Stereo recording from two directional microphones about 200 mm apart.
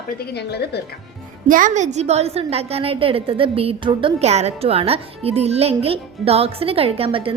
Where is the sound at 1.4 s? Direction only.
40° right (ahead or behind).